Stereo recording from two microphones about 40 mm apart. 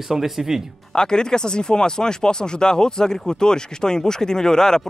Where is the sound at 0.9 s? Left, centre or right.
Centre.